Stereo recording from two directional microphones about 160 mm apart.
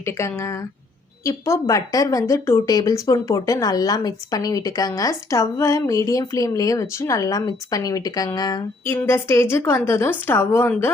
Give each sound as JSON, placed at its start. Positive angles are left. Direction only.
{"t": 0.0, "sound": "a woman's voice", "side_deg": 15}